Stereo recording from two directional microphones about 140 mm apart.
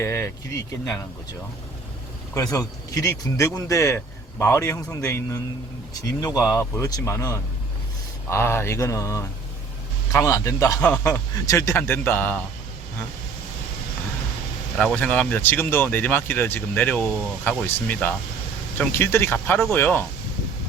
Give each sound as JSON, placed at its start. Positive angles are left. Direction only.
{"t": 0.0, "sound": "a sound", "side_deg": 20}
{"t": 2.3, "sound": "speech", "side_deg": 25}
{"t": 14.8, "sound": "speech", "side_deg": 10}